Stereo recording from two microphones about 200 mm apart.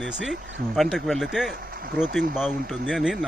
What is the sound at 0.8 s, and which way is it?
Speech, centre (ahead or behind).